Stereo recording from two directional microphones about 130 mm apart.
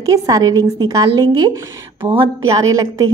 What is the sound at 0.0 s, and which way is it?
A woman's voice, 25° right (ahead or behind).